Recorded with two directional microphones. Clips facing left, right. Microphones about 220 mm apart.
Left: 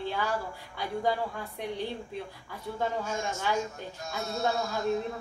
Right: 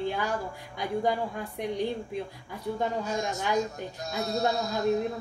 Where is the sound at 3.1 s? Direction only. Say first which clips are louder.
Right 2 dB; 35° right (ahead or behind).